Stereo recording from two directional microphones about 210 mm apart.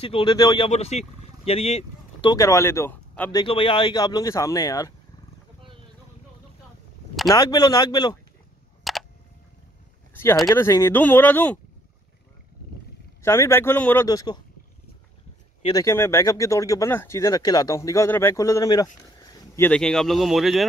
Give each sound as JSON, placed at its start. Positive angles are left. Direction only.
{"t": 0.0, "sound": "speech", "side_deg": 25}
{"t": 0.7, "sound": "speech", "side_deg": 30}
{"t": 2.3, "sound": "speech", "side_deg": 15}
{"t": 7.2, "sound": "speech", "side_deg": 20}
{"t": 8.9, "sound": "a sound", "side_deg": 0}
{"t": 10.1, "sound": "speech", "side_deg": 10}
{"t": 13.2, "sound": "speech", "side_deg": 10}
{"t": 15.6, "sound": "speech", "side_deg": 15}